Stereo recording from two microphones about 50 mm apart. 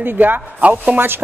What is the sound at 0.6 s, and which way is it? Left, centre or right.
Speech, right.